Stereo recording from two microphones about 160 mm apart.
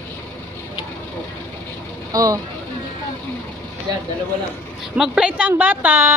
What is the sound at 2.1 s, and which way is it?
Speech, 20° right (ahead or behind).